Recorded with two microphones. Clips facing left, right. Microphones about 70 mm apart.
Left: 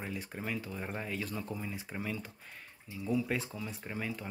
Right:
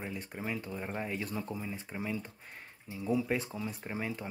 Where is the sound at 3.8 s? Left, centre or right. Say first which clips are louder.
Left 1 dB; right.